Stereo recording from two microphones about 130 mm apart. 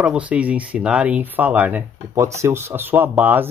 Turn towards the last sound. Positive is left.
turn(degrees=-15)  # may be behind; listen again after turning